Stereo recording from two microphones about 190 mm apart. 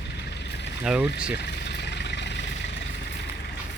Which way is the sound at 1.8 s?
65° left (ahead or behind).